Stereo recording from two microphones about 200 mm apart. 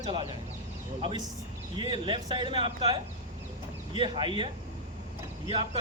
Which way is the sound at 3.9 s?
25° right (ahead or behind).